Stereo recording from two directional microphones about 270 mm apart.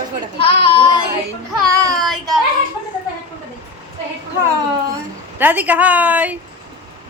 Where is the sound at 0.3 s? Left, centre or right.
Centre.